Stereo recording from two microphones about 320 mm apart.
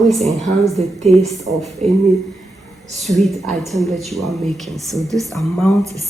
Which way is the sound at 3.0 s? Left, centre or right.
Centre.